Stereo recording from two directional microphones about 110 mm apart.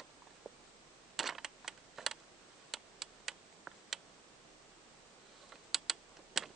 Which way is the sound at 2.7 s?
5° right (ahead or behind).